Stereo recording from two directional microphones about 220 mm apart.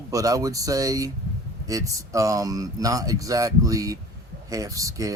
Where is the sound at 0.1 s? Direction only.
15° right (ahead or behind).